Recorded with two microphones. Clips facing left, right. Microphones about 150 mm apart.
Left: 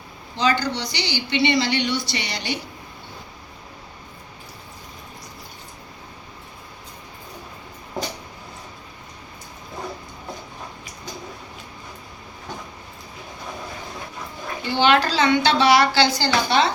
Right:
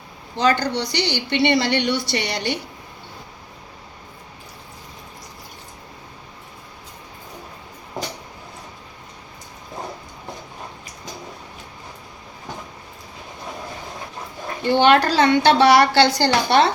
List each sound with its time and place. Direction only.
0.3 s a woman's voice: 55° right (ahead or behind)
14.6 s a woman's voice: 55° right (ahead or behind)